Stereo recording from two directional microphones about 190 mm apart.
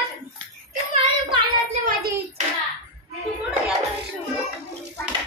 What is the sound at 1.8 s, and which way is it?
Hands, 50° right (ahead or behind).